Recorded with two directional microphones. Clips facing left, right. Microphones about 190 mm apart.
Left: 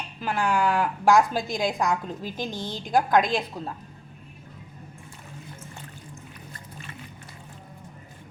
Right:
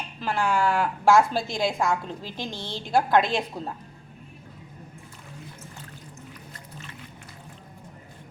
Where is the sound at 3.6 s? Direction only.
10° right (ahead or behind).